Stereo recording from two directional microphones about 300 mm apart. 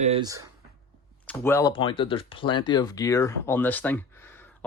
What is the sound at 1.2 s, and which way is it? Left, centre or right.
Speech, centre.